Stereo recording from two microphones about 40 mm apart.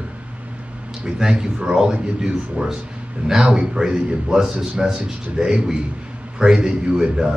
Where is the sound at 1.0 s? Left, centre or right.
Centre.